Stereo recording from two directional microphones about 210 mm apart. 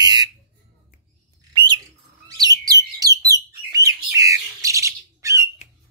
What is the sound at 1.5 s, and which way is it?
Bird, 20° right (ahead or behind).